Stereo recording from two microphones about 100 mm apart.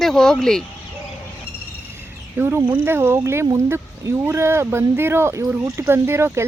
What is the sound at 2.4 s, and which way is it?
Speech, 20° right (ahead or behind).